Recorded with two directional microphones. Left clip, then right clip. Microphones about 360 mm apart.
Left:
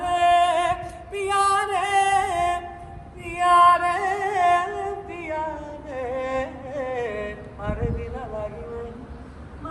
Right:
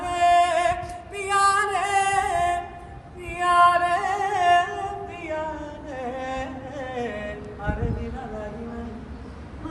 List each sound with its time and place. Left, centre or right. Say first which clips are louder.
0.0 s music: left 1 dB; centre
3.2 s singing: left 2 dB; centre
5.9 s music: left 4 dB; left